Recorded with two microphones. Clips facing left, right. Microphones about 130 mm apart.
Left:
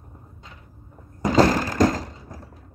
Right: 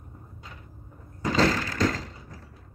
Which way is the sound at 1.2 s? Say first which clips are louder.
Left 6 dB; 40° left (ahead or behind).